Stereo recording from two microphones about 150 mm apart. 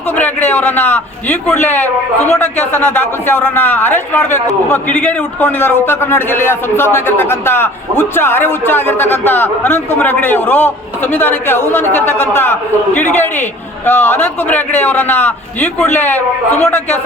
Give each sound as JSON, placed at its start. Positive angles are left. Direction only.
{"t": 0.2, "sound": "a man's voice", "side_deg": 10}